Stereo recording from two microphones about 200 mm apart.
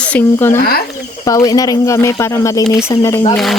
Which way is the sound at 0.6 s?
50° left (ahead or behind).